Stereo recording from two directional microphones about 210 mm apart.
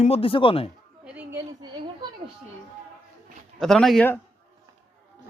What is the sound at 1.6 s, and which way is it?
Speech, 20° right (ahead or behind).